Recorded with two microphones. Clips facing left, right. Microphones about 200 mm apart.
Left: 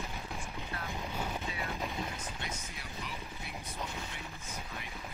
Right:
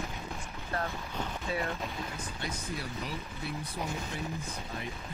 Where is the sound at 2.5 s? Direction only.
35° right (ahead or behind).